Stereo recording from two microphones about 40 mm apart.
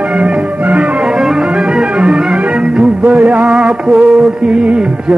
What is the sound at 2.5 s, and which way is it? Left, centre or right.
Music, right.